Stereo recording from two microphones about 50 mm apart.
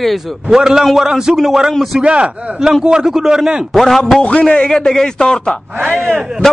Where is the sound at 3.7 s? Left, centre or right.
Centre.